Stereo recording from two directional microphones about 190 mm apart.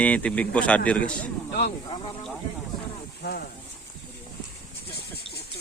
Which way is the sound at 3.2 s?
60° left (ahead or behind).